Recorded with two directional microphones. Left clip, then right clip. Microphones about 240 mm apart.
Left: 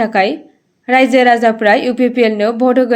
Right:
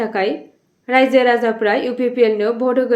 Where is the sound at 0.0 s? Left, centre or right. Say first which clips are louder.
Left 6 dB; left.